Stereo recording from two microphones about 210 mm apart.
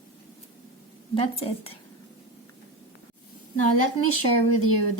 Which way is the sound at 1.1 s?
25° left (ahead or behind).